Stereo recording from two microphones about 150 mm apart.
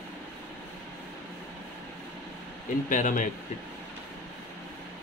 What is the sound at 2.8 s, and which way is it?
Speech, 60° left (ahead or behind).